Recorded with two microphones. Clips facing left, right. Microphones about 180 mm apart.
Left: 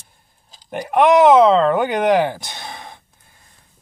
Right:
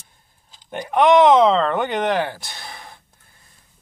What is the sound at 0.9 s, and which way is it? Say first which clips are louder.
Speech: left 2 dB; 5° left (ahead or behind).